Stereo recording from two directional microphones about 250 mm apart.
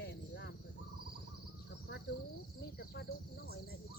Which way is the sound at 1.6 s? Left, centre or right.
Left.